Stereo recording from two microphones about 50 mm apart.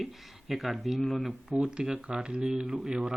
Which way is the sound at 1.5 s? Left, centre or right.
Centre.